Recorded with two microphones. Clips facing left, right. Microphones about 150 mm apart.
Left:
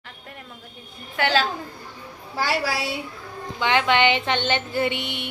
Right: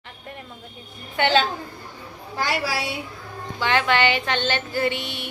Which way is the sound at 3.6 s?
20° left (ahead or behind).